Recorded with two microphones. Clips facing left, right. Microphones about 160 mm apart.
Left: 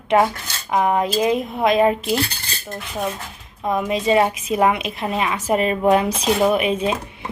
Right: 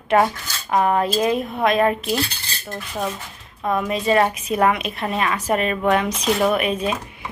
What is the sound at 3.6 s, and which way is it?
Speech, 20° left (ahead or behind).